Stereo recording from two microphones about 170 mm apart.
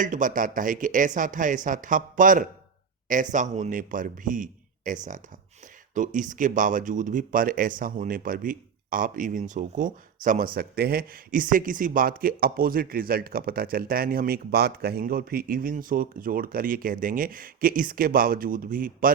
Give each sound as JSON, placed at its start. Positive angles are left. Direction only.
{"t": 0.0, "sound": "speech", "side_deg": -50}